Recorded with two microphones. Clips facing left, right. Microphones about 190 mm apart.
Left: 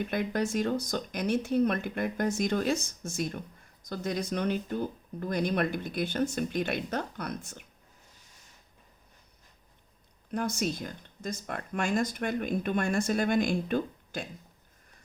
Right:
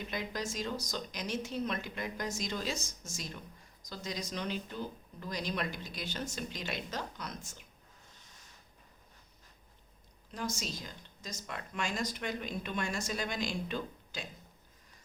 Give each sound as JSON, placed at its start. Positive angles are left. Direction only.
{"t": 0.0, "sound": "speech", "side_deg": 55}
{"t": 10.3, "sound": "speech", "side_deg": 60}